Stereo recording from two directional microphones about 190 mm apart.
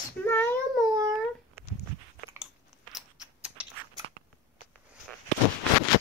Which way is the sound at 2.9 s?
5° right (ahead or behind).